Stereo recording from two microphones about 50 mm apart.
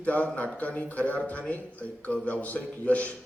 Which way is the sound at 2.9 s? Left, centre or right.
Left.